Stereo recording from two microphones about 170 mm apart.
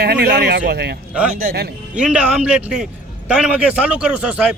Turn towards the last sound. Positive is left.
turn(degrees=-5)  # may be behind; listen again after turning